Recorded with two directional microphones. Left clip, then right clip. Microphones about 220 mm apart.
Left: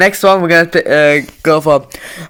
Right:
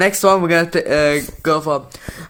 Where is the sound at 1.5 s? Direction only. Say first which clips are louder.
Left 11 dB; 30° left (ahead or behind).